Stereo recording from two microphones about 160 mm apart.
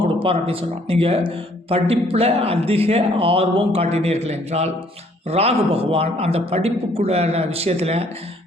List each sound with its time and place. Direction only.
0.0 s speech: 35° right (ahead or behind)